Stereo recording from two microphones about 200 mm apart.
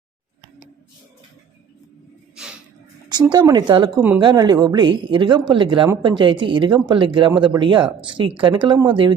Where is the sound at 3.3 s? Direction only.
20° right (ahead or behind).